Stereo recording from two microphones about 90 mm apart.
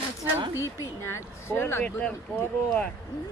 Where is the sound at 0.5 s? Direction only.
35° left (ahead or behind).